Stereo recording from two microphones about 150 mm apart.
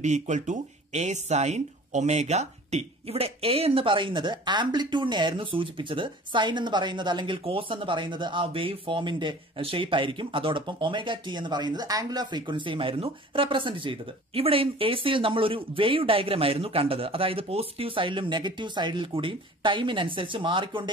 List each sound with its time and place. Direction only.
0.0 s speech: 50° right (ahead or behind); by 20.9 s 35° right (ahead or behind)